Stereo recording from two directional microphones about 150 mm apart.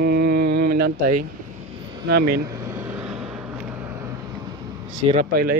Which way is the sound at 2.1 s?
90° right.